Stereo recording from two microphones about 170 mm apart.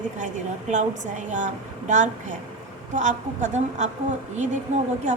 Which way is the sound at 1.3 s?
45° right (ahead or behind).